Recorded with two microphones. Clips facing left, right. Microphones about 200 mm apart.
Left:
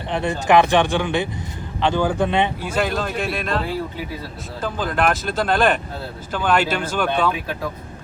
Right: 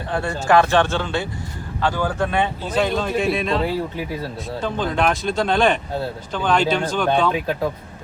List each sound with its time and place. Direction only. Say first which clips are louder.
0.1 s speech: left 1 dB; 20° left (ahead or behind)
2.6 s speech: right 2 dB; 5° left (ahead or behind)
4.6 s speech: even; 5° left (ahead or behind)